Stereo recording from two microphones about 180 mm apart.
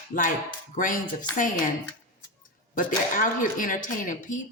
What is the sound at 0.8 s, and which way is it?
Speech, 50° left (ahead or behind).